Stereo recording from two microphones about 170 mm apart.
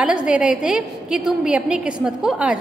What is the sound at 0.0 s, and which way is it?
A woman's voice, 5° right (ahead or behind).